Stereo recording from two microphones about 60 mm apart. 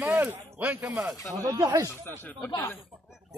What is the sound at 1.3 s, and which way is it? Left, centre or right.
Speech, right.